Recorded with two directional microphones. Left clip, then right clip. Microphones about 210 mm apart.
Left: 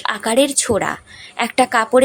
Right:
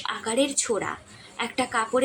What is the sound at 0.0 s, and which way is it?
A woman's voice, 50° left (ahead or behind).